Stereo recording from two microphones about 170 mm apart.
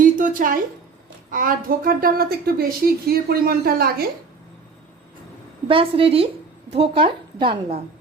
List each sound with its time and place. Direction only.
0.0 s a sound: 50° right (ahead or behind)
1.3 s a woman's voice: 55° right (ahead or behind)
5.6 s a woman's voice: 30° right (ahead or behind)